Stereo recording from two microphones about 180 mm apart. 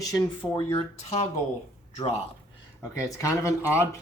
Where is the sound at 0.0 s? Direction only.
20° left (ahead or behind).